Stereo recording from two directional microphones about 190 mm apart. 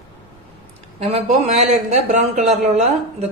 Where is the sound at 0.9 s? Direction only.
35° right (ahead or behind).